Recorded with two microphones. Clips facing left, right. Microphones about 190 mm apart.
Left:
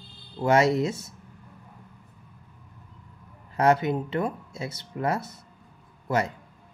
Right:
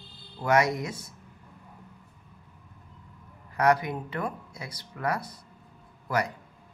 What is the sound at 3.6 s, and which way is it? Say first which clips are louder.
Speech: left 3 dB; 25° left (ahead or behind).